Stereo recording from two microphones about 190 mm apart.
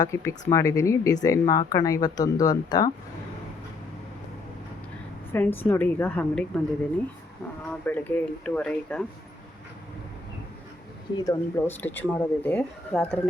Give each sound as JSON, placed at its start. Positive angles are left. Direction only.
{"t": 0.0, "sound": "speech", "side_deg": 15}
{"t": 5.3, "sound": "speech", "side_deg": 10}
{"t": 7.7, "sound": "speech", "side_deg": 10}
{"t": 11.2, "sound": "speech", "side_deg": 15}